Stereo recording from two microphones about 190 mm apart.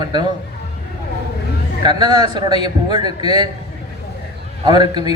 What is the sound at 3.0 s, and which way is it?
Speech, 30° left (ahead or behind).